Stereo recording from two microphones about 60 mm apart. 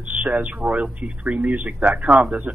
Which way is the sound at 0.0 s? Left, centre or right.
Right.